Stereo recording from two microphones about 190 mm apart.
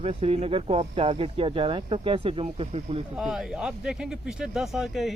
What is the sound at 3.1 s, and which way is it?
Speech, centre (ahead or behind).